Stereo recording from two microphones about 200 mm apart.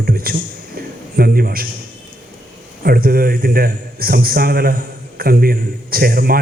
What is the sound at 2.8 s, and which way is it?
A man's voice, 50° right (ahead or behind).